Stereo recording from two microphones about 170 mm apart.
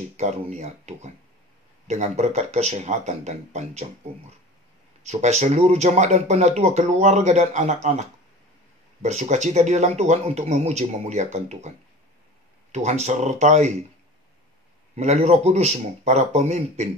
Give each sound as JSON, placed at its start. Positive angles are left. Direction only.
{"t": 0.2, "sound": "speech", "side_deg": -40}
{"t": 5.0, "sound": "speech", "side_deg": -40}
{"t": 12.7, "sound": "speech", "side_deg": -40}
{"t": 15.0, "sound": "speech", "side_deg": -40}